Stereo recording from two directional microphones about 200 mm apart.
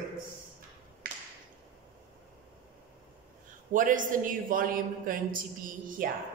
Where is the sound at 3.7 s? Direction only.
40° right (ahead or behind).